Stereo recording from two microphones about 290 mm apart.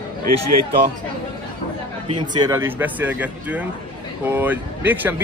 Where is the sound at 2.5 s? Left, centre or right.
Centre.